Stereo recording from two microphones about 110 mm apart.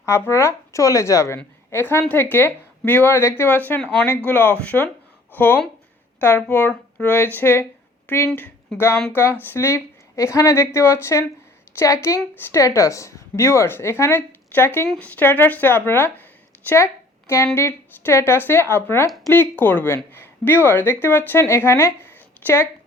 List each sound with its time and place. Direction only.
0.0 s a woman's voice: 25° left (ahead or behind)